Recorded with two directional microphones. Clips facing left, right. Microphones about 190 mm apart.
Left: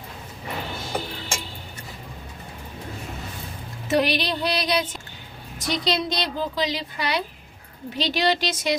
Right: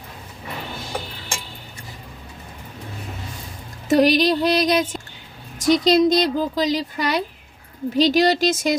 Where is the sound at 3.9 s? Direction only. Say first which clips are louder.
Right 7 dB; 45° right (ahead or behind).